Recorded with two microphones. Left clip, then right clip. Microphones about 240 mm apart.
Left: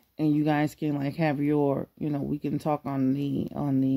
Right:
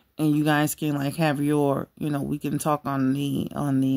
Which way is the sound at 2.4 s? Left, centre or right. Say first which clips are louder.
Right 4 dB; right.